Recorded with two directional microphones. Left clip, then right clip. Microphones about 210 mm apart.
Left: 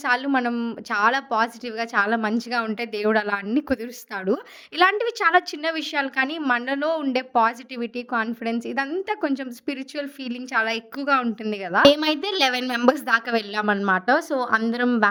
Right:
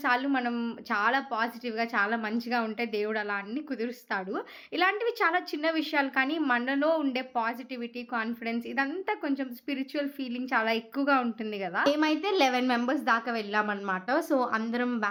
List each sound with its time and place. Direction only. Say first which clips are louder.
0.0 s a woman's voice: left 5 dB; 55° left (ahead or behind)
4.8 s a woman's voice: left 7 dB; 55° left (ahead or behind); by 15.1 s 35° left (ahead or behind)